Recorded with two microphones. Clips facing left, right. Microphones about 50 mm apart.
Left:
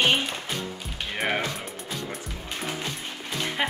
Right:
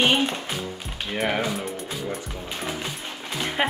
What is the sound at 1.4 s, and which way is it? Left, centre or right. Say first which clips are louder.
Speech: right 4 dB; centre.